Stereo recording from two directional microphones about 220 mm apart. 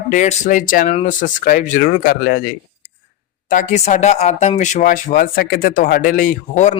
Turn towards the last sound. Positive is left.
turn(degrees=35)  # may be behind; listen again after turning